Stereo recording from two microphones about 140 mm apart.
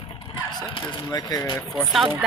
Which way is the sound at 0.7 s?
25° left (ahead or behind).